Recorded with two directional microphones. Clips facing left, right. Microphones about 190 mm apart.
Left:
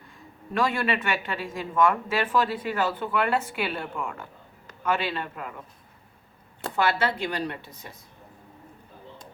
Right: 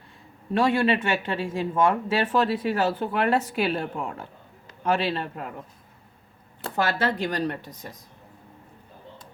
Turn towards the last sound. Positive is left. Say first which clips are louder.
# right 4 dB
turn(degrees=-40)  # may be behind; listen again after turning